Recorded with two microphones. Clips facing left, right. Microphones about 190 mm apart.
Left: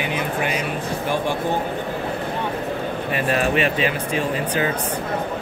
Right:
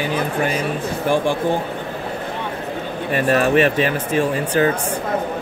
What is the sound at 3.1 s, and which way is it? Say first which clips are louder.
Speech: right 5 dB; 45° right (ahead or behind).